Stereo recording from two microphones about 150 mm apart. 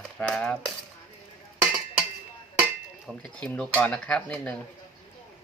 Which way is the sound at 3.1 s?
5° left (ahead or behind).